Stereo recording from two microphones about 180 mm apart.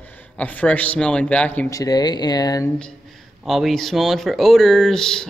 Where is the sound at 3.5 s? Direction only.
Centre (ahead or behind).